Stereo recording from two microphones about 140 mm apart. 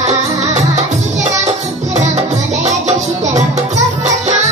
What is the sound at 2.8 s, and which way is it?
Music, 55° right (ahead or behind).